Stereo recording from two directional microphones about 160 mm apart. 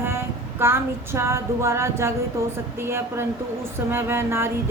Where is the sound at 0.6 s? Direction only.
15° right (ahead or behind).